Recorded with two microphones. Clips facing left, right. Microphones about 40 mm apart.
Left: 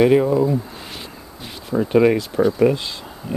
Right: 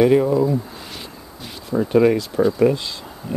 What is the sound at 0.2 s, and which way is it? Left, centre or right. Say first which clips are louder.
Speech: even; centre.